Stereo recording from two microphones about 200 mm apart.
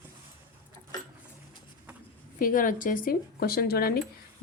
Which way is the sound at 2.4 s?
45° left (ahead or behind).